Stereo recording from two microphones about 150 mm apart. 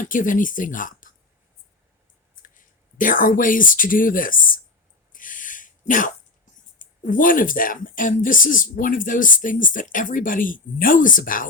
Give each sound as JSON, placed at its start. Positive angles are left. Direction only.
{"t": 0.0, "sound": "speech", "side_deg": 60}
{"t": 3.0, "sound": "speech", "side_deg": 65}
{"t": 5.1, "sound": "a sound", "side_deg": 60}
{"t": 6.7, "sound": "speech", "side_deg": 60}